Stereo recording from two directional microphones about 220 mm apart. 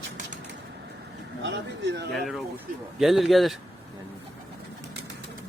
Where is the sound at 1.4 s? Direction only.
55° right (ahead or behind).